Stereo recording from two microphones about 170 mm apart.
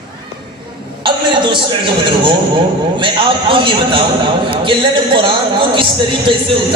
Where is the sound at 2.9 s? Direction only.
30° right (ahead or behind).